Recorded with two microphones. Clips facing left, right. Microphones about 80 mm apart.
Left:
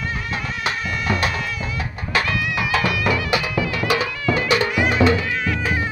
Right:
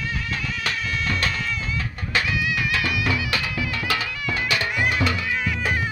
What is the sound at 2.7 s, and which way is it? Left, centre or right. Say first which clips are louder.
Music: left 4 dB; left.